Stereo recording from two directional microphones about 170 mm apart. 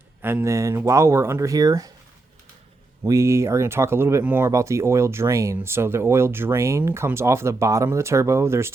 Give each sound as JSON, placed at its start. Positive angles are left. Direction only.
{"t": 0.2, "sound": "speech", "side_deg": -10}
{"t": 3.0, "sound": "speech", "side_deg": -15}